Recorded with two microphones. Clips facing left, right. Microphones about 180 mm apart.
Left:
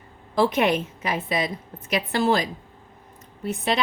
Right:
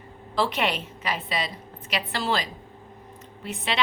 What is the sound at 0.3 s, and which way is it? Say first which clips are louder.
Speech: left 5 dB; 45° left (ahead or behind).